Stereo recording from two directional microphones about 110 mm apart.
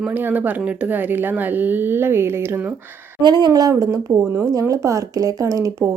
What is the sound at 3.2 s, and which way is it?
Speech, 40° right (ahead or behind).